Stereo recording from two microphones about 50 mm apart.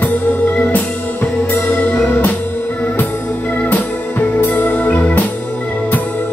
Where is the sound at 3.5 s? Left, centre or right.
Left.